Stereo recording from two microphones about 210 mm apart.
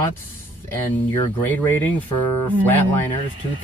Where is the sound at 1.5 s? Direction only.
10° left (ahead or behind).